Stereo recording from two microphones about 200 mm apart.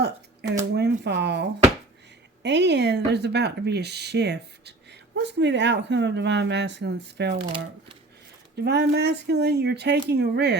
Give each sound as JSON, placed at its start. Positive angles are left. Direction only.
{"t": 0.7, "sound": "speech", "side_deg": -55}
{"t": 8.5, "sound": "speech", "side_deg": -55}